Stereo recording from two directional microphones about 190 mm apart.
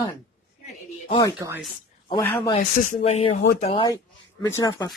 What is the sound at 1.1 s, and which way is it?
Speech, 20° left (ahead or behind).